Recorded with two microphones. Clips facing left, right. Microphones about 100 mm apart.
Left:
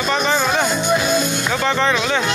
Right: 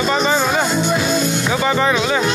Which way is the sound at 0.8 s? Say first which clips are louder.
Even; 15° left (ahead or behind).